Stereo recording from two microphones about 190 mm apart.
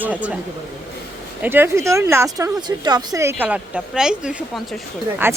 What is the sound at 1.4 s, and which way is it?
Speech, 10° right (ahead or behind).